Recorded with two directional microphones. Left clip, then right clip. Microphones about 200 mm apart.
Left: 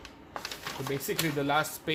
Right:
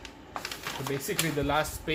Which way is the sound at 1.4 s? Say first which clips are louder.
Even; 35° left (ahead or behind).